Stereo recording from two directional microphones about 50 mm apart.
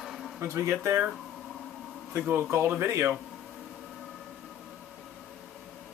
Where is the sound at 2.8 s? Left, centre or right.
Right.